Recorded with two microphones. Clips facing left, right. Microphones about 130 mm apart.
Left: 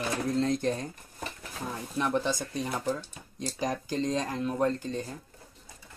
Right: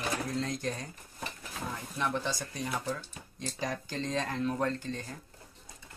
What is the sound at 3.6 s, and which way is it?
Speech, 15° left (ahead or behind).